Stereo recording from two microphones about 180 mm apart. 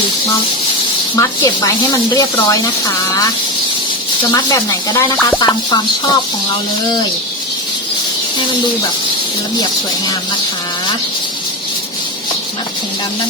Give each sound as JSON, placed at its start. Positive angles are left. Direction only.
{"t": 1.1, "sound": "speech", "side_deg": 20}
{"t": 4.4, "sound": "speech", "side_deg": 20}
{"t": 5.4, "sound": "speech", "side_deg": 20}